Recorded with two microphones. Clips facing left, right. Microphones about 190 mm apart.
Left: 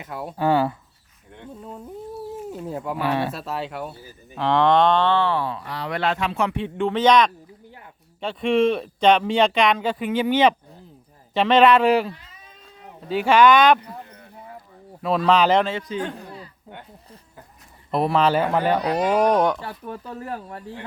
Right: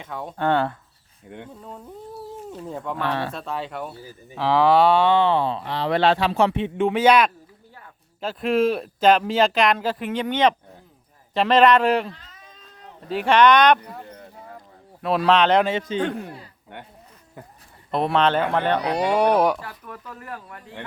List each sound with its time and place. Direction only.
0.0 s speech: 5° left (ahead or behind)
2.5 s speech: 5° left (ahead or behind)
4.4 s moo: 5° right (ahead or behind)
8.2 s speech: 5° right (ahead or behind)
15.0 s speech: centre (ahead or behind)
15.9 s speech: 25° right (ahead or behind)
17.9 s speech: centre (ahead or behind)
19.6 s speech: 30° left (ahead or behind)